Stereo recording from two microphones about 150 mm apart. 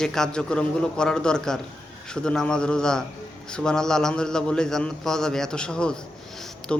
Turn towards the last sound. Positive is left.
turn(degrees=5)  # may be behind; listen again after turning